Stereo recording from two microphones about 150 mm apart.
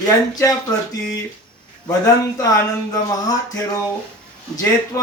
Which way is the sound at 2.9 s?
25° left (ahead or behind).